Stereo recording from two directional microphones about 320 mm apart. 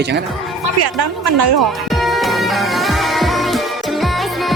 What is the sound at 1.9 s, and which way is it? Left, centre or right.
Music, centre.